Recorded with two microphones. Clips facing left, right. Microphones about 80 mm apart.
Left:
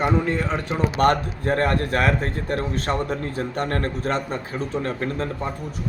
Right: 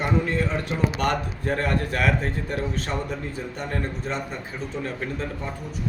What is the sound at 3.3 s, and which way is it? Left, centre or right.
A man's voice, left.